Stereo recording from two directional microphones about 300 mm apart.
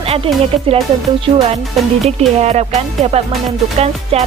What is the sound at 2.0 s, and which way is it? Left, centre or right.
Speech, right.